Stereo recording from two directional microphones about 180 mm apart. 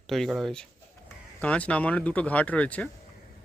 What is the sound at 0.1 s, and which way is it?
Speech, centre (ahead or behind).